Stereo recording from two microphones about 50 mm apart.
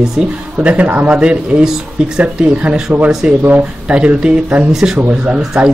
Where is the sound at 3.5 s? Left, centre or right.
Right.